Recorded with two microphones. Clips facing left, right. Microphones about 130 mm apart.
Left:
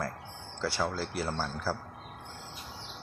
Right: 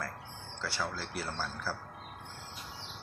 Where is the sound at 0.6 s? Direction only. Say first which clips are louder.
Left 6 dB; 35° left (ahead or behind).